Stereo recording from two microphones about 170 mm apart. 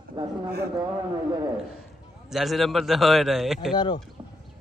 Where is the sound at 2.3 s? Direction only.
Centre (ahead or behind).